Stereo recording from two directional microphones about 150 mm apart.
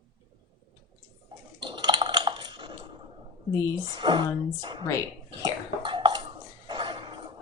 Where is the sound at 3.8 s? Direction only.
30° right (ahead or behind).